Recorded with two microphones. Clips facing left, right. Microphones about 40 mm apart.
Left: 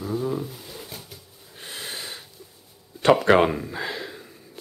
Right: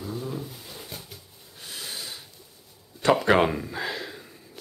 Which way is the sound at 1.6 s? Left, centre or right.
Left.